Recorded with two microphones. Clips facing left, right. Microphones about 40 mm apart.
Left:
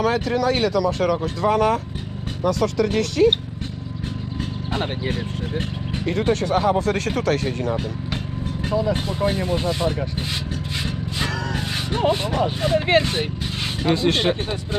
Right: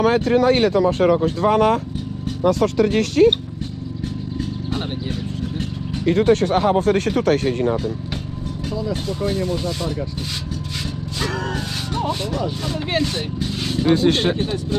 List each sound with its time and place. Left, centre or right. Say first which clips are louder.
0.0 s speech: right 4 dB; right
4.4 s a sound: left 1 dB; left
6.1 s speech: right 5 dB; right
8.7 s speech: left 3 dB; left
11.2 s a sound: right 2 dB; left
14.3 s speech: right 4 dB; left